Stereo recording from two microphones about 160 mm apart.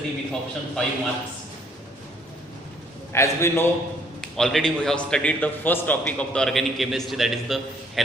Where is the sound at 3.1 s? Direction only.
15° left (ahead or behind).